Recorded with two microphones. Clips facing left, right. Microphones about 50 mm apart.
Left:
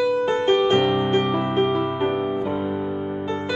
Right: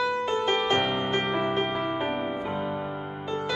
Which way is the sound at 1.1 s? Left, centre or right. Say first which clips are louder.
Left 6 dB; right.